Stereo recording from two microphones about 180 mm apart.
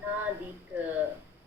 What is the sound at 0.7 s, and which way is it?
Speech, 10° right (ahead or behind).